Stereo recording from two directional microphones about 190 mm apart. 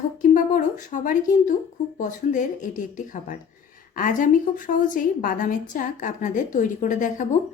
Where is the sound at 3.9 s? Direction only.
45° left (ahead or behind).